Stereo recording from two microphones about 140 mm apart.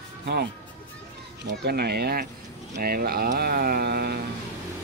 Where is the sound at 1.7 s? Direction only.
90° right.